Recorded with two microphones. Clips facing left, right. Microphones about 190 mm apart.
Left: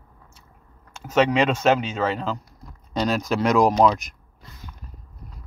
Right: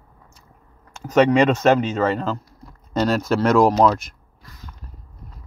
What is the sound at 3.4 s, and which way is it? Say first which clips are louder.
Speech: right 3 dB; 15° left (ahead or behind).